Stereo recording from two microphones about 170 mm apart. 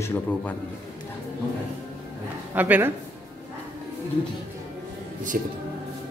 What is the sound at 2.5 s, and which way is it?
Speech, 10° right (ahead or behind).